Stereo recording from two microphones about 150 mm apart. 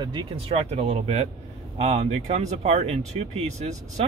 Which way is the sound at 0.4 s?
45° right (ahead or behind).